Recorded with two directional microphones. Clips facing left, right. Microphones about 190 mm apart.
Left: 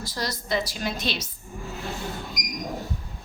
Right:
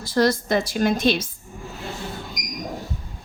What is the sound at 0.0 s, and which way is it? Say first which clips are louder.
A woman's voice: right 12 dB; 55° right (ahead or behind).